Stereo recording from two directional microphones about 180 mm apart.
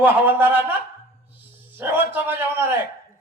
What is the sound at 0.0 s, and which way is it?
A man's voice, 10° right (ahead or behind).